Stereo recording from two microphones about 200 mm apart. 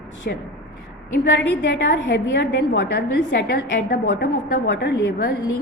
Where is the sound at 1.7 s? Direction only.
60° left (ahead or behind).